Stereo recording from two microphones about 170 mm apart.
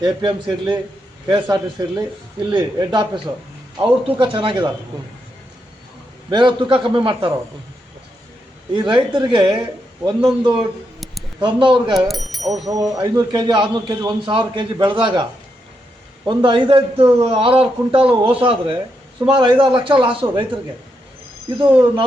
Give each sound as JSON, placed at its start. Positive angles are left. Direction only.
{"t": 0.0, "sound": "a man's voice", "side_deg": -25}
{"t": 6.3, "sound": "a man's voice", "side_deg": -30}
{"t": 8.7, "sound": "a man's voice", "side_deg": -25}
{"t": 11.3, "sound": "a man's voice", "side_deg": -30}
{"t": 11.9, "sound": "speech", "side_deg": 0}
{"t": 12.6, "sound": "a man's voice", "side_deg": -20}
{"t": 21.6, "sound": "a man's voice", "side_deg": -30}